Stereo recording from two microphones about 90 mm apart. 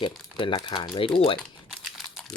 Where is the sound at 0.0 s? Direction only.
70° left (ahead or behind).